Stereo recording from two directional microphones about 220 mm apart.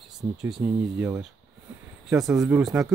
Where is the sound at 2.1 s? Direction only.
Centre (ahead or behind).